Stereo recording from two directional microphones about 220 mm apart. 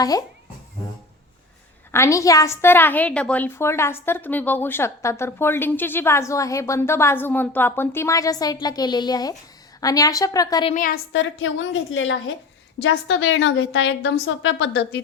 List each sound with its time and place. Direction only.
0.0 s a woman's voice: 15° left (ahead or behind)
1.9 s a woman's voice: 15° left (ahead or behind)
10.8 s a woman's voice: 40° left (ahead or behind)